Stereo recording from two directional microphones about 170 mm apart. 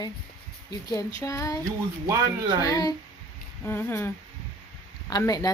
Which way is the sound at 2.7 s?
25° left (ahead or behind).